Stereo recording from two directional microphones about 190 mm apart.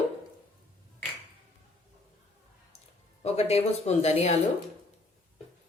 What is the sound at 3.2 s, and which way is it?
Speech, 35° left (ahead or behind).